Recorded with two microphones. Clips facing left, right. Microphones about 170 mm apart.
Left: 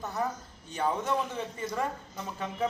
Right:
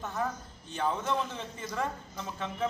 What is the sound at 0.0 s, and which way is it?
A man's voice, 15° left (ahead or behind).